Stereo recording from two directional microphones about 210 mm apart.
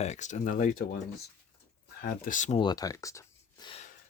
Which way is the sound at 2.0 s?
45° left (ahead or behind).